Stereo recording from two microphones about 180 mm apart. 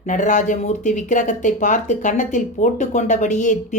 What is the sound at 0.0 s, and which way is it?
A woman's voice, 45° left (ahead or behind).